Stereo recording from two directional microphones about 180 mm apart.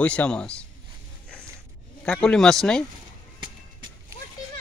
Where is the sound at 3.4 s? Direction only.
25° right (ahead or behind).